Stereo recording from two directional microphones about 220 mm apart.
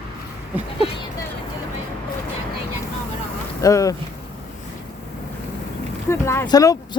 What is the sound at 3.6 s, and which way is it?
Speech, 15° left (ahead or behind).